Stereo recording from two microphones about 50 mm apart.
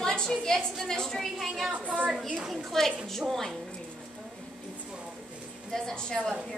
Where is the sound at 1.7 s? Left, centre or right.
Right.